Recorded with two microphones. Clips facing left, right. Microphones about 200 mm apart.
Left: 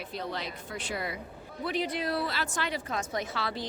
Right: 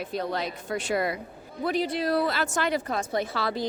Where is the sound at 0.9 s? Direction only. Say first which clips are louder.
Right 8 dB; 90° right.